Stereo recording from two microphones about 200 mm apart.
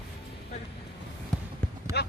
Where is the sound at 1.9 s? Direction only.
55° left (ahead or behind).